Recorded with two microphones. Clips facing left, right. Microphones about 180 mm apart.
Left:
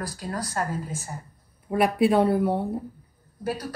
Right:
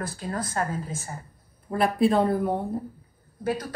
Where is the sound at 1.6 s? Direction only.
10° left (ahead or behind).